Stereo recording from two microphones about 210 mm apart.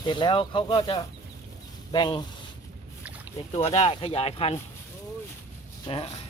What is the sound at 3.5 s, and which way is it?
Speech, 30° left (ahead or behind).